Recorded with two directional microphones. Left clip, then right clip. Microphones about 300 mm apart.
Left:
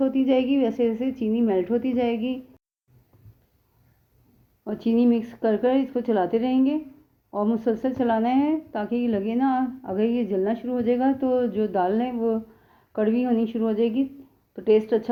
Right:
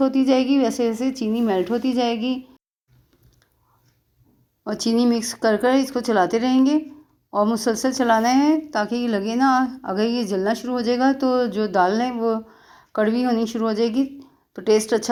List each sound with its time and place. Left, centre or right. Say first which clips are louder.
0.0 s speech: right 3 dB; right
4.6 s speech: right 2 dB; centre